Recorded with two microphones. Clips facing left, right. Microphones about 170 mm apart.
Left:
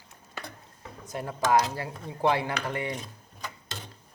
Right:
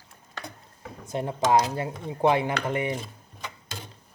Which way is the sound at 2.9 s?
Centre (ahead or behind).